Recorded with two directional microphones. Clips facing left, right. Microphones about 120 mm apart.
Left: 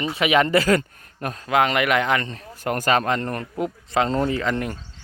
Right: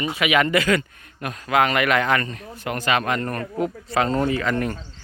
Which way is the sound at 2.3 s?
45° left (ahead or behind).